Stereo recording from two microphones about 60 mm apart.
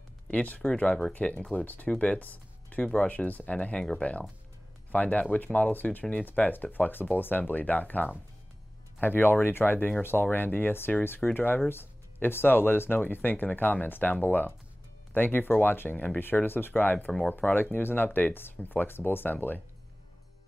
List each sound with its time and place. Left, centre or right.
0.3 s speech: left